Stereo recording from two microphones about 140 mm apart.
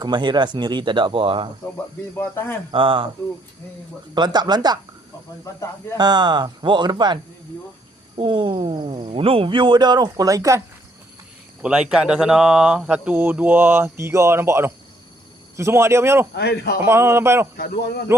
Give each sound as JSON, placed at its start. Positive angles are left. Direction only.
{"t": 0.0, "sound": "speech", "side_deg": -35}
{"t": 2.1, "sound": "speech", "side_deg": 15}
{"t": 2.7, "sound": "speech", "side_deg": -35}
{"t": 4.1, "sound": "speech", "side_deg": -30}
{"t": 6.0, "sound": "speech", "side_deg": -30}
{"t": 11.6, "sound": "a man's voice", "side_deg": -5}